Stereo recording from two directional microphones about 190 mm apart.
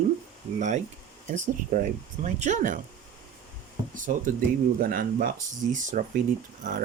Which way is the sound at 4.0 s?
45° right (ahead or behind).